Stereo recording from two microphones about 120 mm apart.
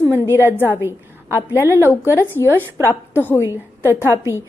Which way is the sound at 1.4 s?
25° left (ahead or behind).